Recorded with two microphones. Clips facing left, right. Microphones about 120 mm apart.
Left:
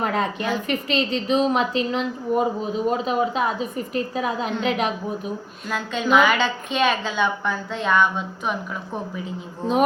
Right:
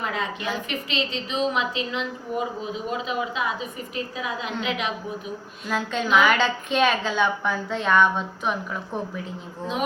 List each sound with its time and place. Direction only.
0.0 s a woman's voice: 45° left (ahead or behind)
5.6 s a woman's voice: centre (ahead or behind)